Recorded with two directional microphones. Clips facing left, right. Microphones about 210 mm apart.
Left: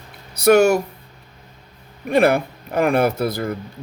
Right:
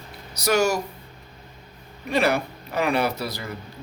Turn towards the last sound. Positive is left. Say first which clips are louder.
# left 7 dB
turn(degrees=50)  # may be behind; listen again after turning